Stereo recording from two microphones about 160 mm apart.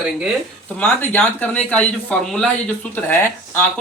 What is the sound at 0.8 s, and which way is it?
Speech, 10° left (ahead or behind).